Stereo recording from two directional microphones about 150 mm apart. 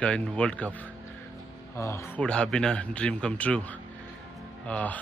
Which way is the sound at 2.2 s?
5° left (ahead or behind).